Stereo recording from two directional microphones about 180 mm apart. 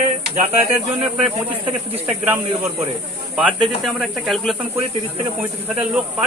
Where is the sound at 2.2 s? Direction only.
10° right (ahead or behind).